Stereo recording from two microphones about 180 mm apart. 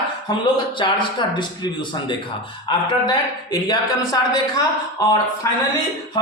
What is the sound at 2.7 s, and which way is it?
Speech, 20° left (ahead or behind).